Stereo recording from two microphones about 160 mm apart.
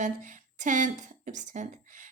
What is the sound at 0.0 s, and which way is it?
A woman's voice, 50° right (ahead or behind).